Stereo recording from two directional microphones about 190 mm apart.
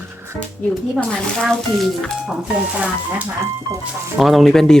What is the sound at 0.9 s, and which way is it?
Speech, centre (ahead or behind).